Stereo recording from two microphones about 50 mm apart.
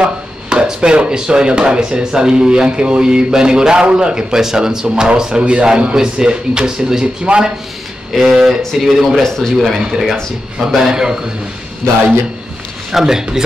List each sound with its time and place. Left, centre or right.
0.0 s speech: centre
8.1 s speech: centre
10.7 s speech: centre
12.9 s speech: centre